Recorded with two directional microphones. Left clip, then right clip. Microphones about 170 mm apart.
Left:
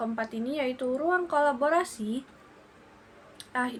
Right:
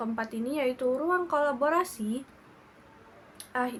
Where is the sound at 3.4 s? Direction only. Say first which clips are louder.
Even; 15° right (ahead or behind).